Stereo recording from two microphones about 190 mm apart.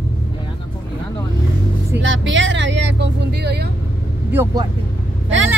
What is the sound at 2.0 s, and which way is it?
Speech, 75° right (ahead or behind).